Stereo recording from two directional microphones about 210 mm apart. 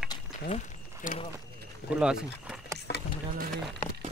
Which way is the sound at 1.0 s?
40° left (ahead or behind).